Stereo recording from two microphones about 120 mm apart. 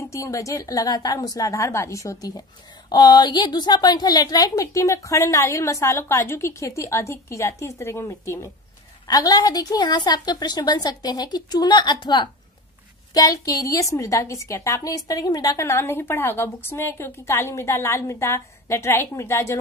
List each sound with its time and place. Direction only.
0.1 s a woman's voice: 25° left (ahead or behind)